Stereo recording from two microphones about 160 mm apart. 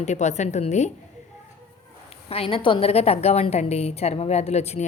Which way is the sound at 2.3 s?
35° left (ahead or behind).